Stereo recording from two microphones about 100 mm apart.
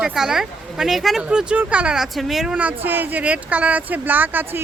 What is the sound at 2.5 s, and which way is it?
Speech, 15° right (ahead or behind).